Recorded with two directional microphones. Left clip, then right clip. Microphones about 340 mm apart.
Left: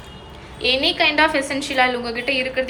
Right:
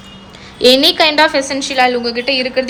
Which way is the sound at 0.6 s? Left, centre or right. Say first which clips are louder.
Right 8 dB; centre.